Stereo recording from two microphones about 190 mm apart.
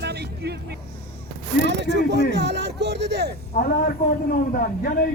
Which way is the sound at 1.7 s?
65° right (ahead or behind).